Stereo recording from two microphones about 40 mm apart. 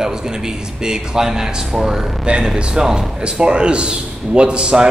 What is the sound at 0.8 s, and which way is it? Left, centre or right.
A man's voice, centre.